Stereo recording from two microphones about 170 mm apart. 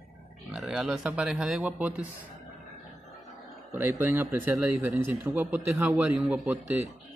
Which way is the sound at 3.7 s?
10° right (ahead or behind).